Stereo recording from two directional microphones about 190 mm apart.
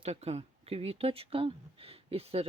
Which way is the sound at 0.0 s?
35° right (ahead or behind).